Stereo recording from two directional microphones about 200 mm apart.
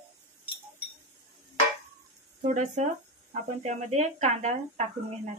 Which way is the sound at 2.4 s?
35° right (ahead or behind).